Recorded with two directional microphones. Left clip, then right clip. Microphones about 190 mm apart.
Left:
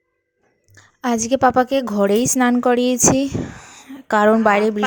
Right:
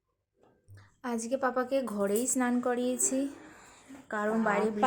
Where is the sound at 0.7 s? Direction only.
40° left (ahead or behind).